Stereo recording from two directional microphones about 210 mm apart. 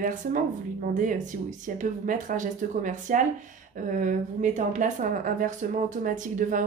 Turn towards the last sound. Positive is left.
turn(degrees=-40)  # may be behind; listen again after turning